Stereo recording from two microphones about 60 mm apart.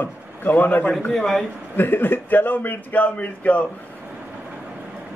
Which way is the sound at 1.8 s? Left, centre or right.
Left.